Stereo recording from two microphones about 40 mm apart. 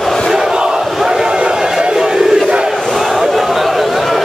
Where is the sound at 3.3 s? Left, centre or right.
Centre.